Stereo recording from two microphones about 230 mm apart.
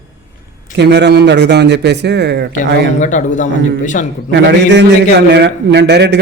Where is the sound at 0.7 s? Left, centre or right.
Right.